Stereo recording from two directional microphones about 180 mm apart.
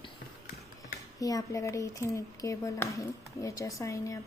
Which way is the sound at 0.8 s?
20° left (ahead or behind).